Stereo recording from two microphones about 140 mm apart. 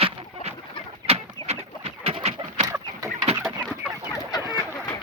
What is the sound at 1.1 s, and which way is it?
Bird, 45° right (ahead or behind).